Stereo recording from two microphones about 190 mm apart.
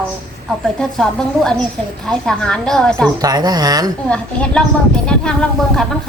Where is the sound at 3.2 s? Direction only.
20° right (ahead or behind).